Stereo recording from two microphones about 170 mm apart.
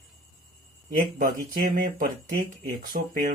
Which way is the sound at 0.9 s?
55° right (ahead or behind).